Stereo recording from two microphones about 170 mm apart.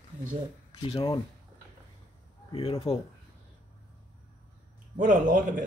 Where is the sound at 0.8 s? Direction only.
30° left (ahead or behind).